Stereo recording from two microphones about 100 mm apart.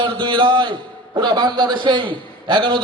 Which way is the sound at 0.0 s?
50° right (ahead or behind).